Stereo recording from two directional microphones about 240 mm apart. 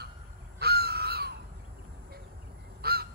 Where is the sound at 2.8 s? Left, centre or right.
Right.